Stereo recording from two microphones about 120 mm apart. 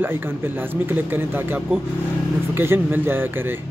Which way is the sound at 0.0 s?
20° right (ahead or behind).